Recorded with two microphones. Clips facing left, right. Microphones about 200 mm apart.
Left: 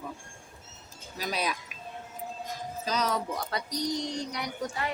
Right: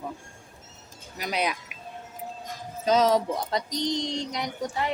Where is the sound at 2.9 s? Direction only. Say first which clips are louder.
Right 9 dB; 25° right (ahead or behind).